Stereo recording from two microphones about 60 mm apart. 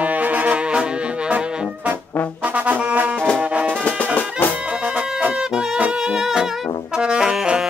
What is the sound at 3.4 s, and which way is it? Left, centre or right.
Music, right.